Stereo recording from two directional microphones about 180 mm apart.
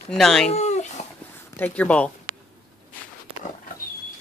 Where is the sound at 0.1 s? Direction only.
Centre (ahead or behind).